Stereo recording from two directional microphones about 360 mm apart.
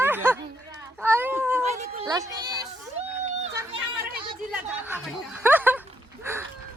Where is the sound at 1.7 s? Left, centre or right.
Centre.